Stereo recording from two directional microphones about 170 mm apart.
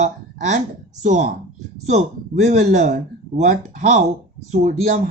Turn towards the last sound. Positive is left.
turn(degrees=-40)  # may be behind; listen again after turning